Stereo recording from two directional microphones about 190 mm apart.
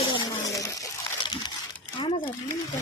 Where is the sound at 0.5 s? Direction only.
15° left (ahead or behind).